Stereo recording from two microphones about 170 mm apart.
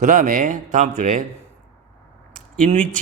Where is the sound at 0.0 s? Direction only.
50° right (ahead or behind).